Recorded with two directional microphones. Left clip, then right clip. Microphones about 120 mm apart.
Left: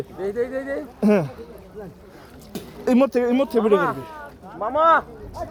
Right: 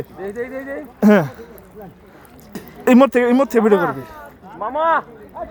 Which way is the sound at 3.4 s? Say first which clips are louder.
Right 5 dB; 55° right (ahead or behind).